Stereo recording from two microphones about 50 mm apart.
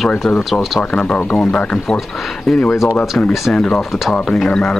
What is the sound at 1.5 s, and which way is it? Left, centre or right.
Speech, left.